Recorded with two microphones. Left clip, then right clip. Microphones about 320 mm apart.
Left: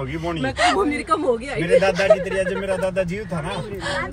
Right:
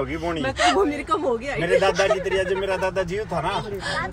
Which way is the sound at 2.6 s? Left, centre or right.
Right.